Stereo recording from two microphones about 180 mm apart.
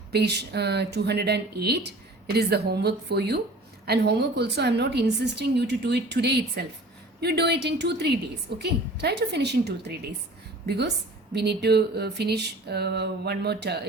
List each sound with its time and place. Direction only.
0.1 s a woman's voice: 65° right (ahead or behind)